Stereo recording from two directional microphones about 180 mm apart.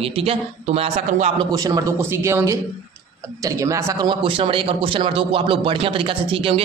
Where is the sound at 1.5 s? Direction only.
20° right (ahead or behind).